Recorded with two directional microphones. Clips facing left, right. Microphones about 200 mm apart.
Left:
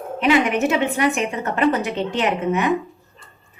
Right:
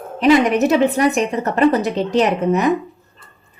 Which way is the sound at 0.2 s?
40° right (ahead or behind).